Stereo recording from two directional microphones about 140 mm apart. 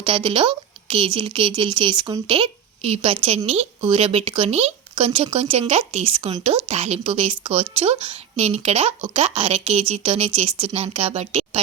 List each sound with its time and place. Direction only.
0.0 s speech: 40° right (ahead or behind)
2.2 s a woman's voice: 45° right (ahead or behind)